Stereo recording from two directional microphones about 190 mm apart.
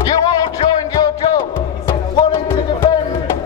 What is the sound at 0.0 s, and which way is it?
Music, 20° left (ahead or behind).